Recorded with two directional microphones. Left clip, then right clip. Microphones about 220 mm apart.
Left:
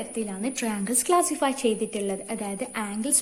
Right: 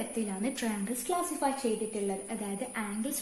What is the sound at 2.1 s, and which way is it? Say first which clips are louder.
A woman's voice: left 5 dB; 30° left (ahead or behind).